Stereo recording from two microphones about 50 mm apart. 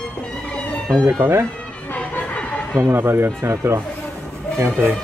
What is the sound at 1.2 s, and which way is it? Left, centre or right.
Speech, right.